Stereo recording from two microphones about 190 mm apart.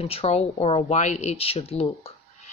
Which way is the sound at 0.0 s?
30° left (ahead or behind).